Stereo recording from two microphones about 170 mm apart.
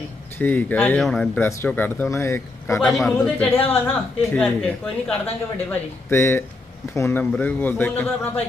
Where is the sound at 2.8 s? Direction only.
Centre (ahead or behind).